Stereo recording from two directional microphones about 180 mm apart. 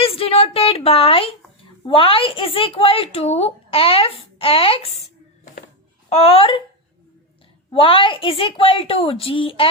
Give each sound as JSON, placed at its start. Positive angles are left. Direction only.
{"t": 0.0, "sound": "a woman's voice", "side_deg": 30}
{"t": 6.1, "sound": "a woman's voice", "side_deg": 35}
{"t": 7.7, "sound": "a woman's voice", "side_deg": 30}